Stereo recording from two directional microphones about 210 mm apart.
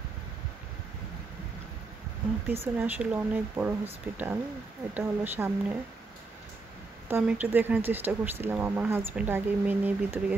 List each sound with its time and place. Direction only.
2.4 s speech: 10° right (ahead or behind)
7.1 s speech: 10° right (ahead or behind)